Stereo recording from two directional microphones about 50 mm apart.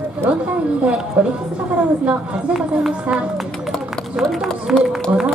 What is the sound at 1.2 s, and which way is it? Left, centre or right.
Speech, right.